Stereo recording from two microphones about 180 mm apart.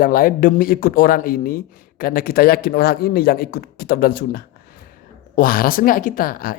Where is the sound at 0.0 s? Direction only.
50° left (ahead or behind).